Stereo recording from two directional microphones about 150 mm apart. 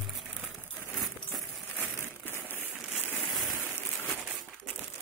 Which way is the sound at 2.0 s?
15° left (ahead or behind).